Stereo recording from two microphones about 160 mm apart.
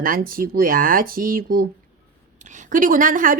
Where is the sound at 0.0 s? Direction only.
60° right (ahead or behind).